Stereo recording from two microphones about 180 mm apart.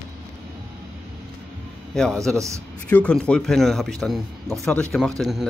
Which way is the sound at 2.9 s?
5° left (ahead or behind).